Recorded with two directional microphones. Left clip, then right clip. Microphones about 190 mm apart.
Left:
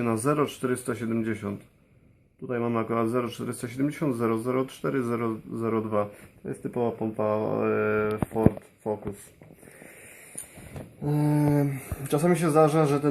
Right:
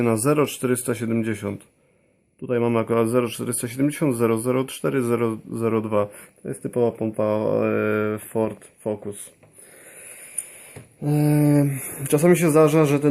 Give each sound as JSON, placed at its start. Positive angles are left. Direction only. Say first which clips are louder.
{"t": 0.0, "sound": "speech", "louder": "right 5 dB", "side_deg": -50}
{"t": 11.0, "sound": "speech", "louder": "right 5 dB", "side_deg": -40}